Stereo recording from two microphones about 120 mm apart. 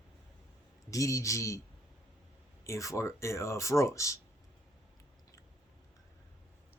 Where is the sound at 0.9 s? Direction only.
25° left (ahead or behind).